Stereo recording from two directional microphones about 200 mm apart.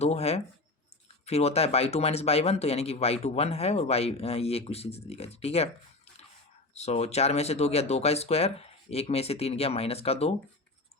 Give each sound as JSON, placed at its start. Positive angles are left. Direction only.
{"t": 0.0, "sound": "speech", "side_deg": 30}
{"t": 6.7, "sound": "speech", "side_deg": 35}